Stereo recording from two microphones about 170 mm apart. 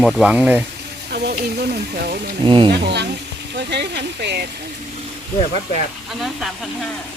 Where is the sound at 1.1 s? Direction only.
70° right (ahead or behind).